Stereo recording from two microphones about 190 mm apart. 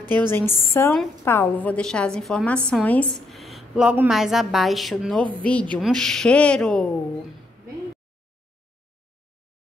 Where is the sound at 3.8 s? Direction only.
5° right (ahead or behind).